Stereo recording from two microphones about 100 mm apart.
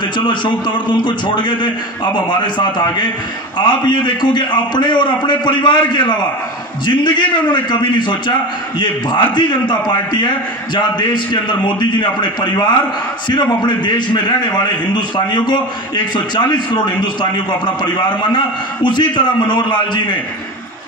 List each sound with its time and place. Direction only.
0.2 s a man's voice: 50° left (ahead or behind)